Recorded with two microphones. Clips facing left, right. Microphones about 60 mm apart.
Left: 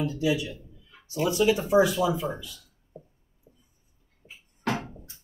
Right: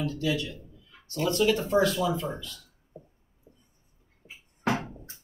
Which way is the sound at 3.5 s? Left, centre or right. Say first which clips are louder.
Right 1 dB; right.